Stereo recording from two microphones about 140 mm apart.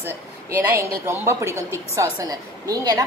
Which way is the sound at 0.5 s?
20° right (ahead or behind).